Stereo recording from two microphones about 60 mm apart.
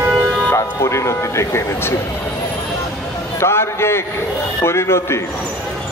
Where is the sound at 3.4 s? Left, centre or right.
Left.